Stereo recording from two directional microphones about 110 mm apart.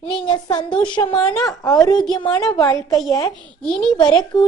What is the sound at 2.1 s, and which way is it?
Speech, 45° left (ahead or behind).